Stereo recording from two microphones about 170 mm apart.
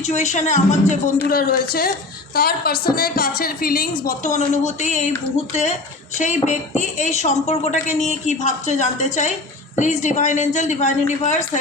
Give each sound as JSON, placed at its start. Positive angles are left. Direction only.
{"t": 0.0, "sound": "speech", "side_deg": 45}
{"t": 1.3, "sound": "a woman's voice", "side_deg": 65}
{"t": 4.0, "sound": "speech", "side_deg": 50}
{"t": 6.1, "sound": "speech", "side_deg": 45}